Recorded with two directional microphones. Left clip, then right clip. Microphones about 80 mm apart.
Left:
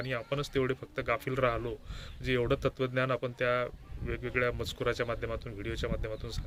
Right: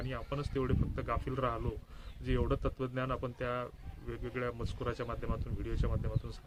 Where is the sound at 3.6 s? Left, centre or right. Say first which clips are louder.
Left 7 dB; left.